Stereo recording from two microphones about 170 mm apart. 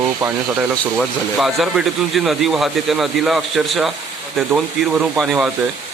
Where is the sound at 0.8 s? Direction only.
Centre (ahead or behind).